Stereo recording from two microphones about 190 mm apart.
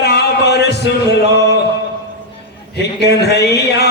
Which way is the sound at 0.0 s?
60° left (ahead or behind).